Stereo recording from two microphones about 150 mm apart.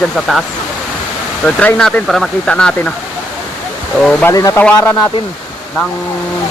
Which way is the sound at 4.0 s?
10° left (ahead or behind).